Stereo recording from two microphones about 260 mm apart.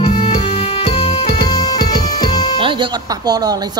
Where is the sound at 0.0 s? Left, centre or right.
Left.